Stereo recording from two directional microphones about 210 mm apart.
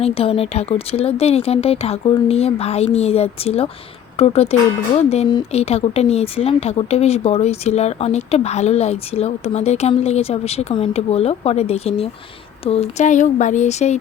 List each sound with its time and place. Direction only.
0.0 s speech: 30° left (ahead or behind)